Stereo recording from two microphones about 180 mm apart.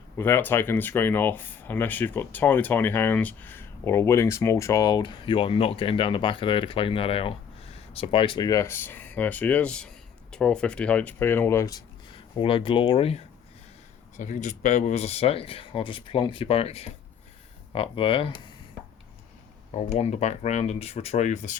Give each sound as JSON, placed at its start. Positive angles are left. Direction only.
{"t": 0.2, "sound": "speech", "side_deg": 10}
{"t": 19.7, "sound": "speech", "side_deg": 35}